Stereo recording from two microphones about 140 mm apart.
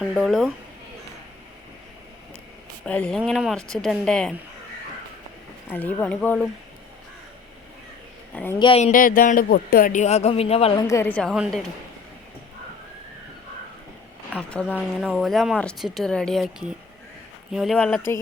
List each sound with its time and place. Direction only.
0.1 s speech: centre (ahead or behind)
2.8 s speech: 10° left (ahead or behind)
5.6 s speech: 15° left (ahead or behind)
8.3 s speech: 10° left (ahead or behind)
8.5 s speech: 35° left (ahead or behind)
8.8 s speech: 75° left (ahead or behind); by 10.8 s 45° left (ahead or behind)
10.8 s a woman's voice: 20° left (ahead or behind)
11.1 s speech: 5° left (ahead or behind)
14.5 s speech: 5° left (ahead or behind)